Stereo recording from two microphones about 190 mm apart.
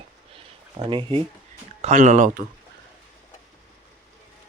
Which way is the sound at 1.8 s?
40° right (ahead or behind).